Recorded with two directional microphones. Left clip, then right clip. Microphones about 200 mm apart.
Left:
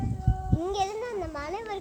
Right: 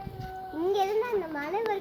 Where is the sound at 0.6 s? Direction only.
Centre (ahead or behind).